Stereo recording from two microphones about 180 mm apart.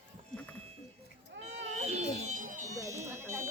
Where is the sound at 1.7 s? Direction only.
35° right (ahead or behind).